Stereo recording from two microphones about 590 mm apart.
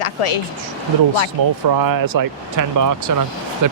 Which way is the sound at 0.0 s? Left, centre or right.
Left.